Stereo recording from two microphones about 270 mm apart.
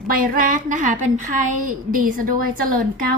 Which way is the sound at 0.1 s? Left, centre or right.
Right.